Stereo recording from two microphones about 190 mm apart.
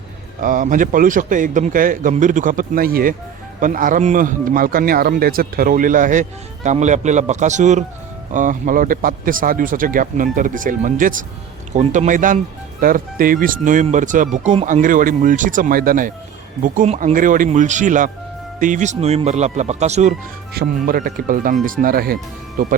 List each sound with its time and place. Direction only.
0.4 s speech: 45° right (ahead or behind)
20.5 s speech: 55° right (ahead or behind)